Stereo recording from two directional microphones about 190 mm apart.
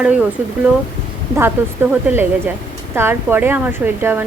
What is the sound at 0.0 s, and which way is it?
Speech, 5° right (ahead or behind).